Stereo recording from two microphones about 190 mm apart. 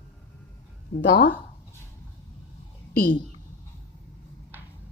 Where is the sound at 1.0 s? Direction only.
65° left (ahead or behind).